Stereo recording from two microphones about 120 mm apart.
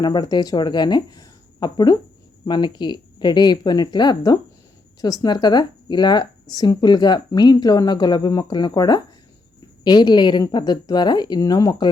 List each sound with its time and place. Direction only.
0.0 s speech: 35° left (ahead or behind)